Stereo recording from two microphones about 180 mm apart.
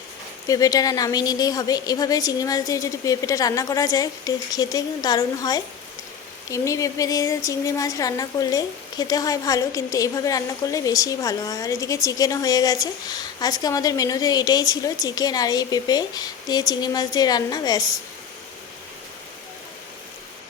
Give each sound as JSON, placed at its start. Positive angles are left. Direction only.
{"t": 0.4, "sound": "speech", "side_deg": 20}